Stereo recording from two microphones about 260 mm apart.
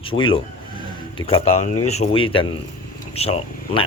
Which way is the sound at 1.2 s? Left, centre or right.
Left.